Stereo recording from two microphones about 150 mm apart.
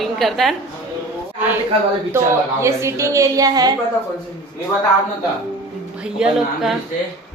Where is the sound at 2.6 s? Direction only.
20° right (ahead or behind).